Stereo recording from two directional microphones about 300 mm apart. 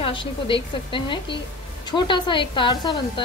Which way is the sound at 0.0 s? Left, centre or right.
Centre.